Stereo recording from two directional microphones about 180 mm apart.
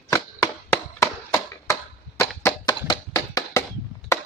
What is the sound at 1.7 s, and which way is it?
Chop, 15° left (ahead or behind).